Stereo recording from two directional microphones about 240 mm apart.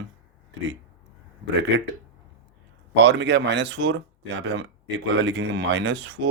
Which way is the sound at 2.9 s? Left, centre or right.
Right.